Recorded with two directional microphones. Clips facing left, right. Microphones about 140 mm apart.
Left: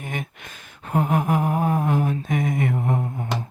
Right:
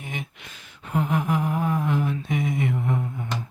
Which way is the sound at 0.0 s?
50° left (ahead or behind).